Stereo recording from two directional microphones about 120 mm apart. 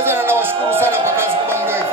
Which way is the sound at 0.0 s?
20° right (ahead or behind).